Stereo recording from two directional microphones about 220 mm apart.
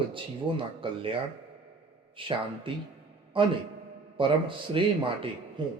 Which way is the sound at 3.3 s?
25° right (ahead or behind).